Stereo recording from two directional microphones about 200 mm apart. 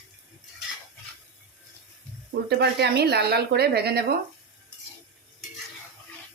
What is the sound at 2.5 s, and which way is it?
Speech, 50° right (ahead or behind).